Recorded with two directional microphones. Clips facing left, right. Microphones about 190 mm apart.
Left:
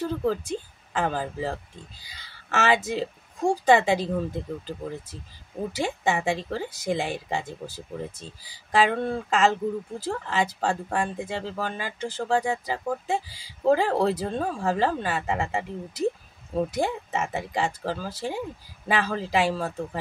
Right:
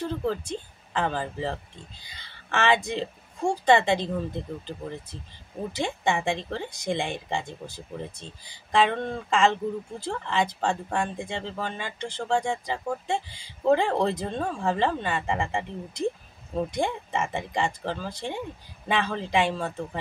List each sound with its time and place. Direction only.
0.0 s speech: 5° left (ahead or behind)